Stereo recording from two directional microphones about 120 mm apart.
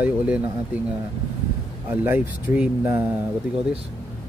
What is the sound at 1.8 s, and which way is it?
Speech, 15° right (ahead or behind).